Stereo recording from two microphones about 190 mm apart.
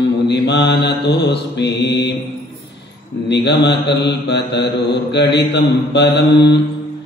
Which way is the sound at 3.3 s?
65° left (ahead or behind).